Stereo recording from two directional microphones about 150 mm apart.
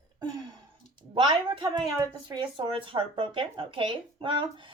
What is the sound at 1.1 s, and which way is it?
Speech, 35° right (ahead or behind).